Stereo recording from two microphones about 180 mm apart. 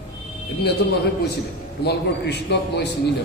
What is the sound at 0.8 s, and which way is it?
A man's voice, 65° left (ahead or behind).